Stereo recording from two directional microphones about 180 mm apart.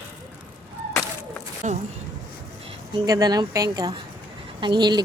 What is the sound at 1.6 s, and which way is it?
Speech, 45° right (ahead or behind).